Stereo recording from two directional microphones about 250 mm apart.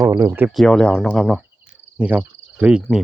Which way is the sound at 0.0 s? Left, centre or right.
Centre.